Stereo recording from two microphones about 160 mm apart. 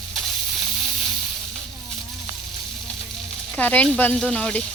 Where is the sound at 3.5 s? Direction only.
10° left (ahead or behind).